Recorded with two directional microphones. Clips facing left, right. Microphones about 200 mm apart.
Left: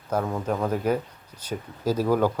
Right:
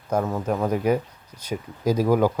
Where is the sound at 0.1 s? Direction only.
5° right (ahead or behind).